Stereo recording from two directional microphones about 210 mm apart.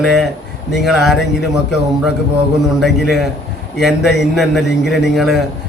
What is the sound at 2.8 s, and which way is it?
A man's voice, centre (ahead or behind).